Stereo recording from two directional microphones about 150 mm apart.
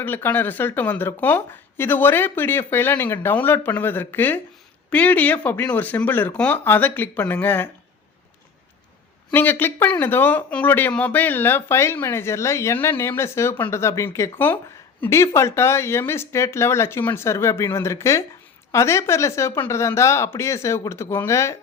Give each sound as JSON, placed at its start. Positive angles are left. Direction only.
{"t": 0.0, "sound": "speech", "side_deg": 15}
{"t": 9.3, "sound": "speech", "side_deg": 15}